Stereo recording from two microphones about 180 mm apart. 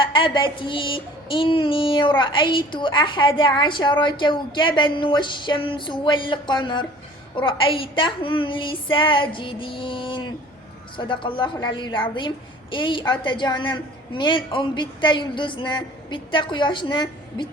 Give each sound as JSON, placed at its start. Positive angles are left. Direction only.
{"t": 0.0, "sound": "child singing", "side_deg": 25}